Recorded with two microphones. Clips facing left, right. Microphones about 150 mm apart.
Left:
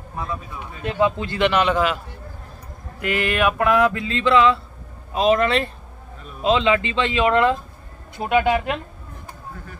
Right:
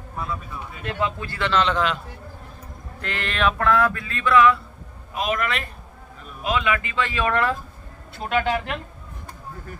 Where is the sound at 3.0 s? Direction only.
10° left (ahead or behind).